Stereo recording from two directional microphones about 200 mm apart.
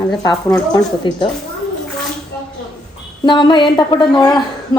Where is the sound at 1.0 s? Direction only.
25° left (ahead or behind).